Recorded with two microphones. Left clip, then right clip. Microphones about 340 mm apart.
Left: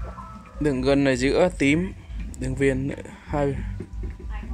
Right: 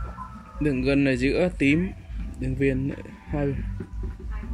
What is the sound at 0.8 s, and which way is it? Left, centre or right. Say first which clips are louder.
A man's voice: left 2 dB; left.